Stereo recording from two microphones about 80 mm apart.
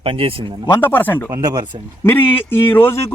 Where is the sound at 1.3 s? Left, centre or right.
Right.